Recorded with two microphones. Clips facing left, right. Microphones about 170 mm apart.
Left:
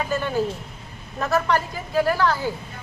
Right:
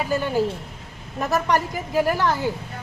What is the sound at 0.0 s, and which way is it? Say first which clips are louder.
A woman's voice: right 2 dB; 10° right (ahead or behind).